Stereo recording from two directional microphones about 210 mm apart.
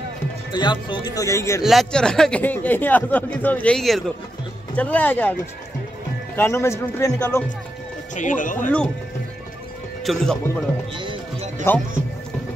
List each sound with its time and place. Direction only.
0.5 s speech: 20° left (ahead or behind)
1.6 s speech: centre (ahead or behind)
6.3 s speech: 10° left (ahead or behind)
8.2 s speech: 40° left (ahead or behind)
10.2 s speech: 5° left (ahead or behind)
11.7 s speech: 10° left (ahead or behind)